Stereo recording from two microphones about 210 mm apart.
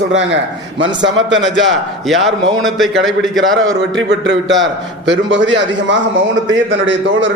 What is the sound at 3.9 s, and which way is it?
A man's voice, 55° right (ahead or behind).